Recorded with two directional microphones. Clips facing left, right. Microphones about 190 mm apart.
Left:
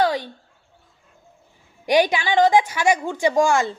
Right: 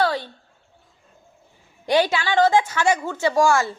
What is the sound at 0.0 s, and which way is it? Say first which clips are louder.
Bird: left 1 dB; 15° left (ahead or behind).